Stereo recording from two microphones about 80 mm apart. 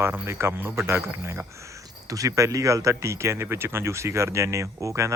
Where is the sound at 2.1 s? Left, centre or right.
Right.